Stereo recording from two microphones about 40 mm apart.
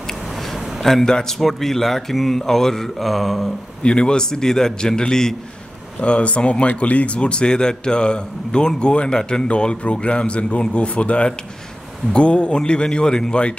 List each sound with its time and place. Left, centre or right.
0.4 s a sound: centre
1.0 s a man's voice: centre
1.4 s speech: centre
3.8 s a man's voice: left
5.9 s a man's voice: left